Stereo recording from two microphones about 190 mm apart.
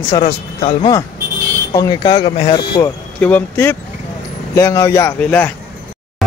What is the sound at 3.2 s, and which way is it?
Speech, 10° left (ahead or behind).